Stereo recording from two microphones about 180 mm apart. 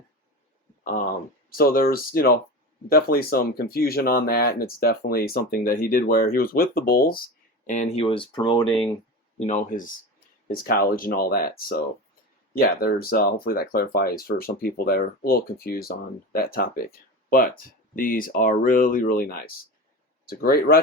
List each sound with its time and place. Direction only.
1.5 s speech: 55° left (ahead or behind)
7.7 s speech: 45° left (ahead or behind)
8.0 s speech: 30° left (ahead or behind)
9.5 s speech: 50° left (ahead or behind)